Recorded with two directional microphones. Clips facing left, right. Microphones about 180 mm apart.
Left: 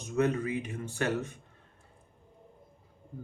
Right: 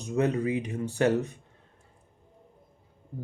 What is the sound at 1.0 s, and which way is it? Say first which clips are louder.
Speech: right 7 dB; 35° right (ahead or behind).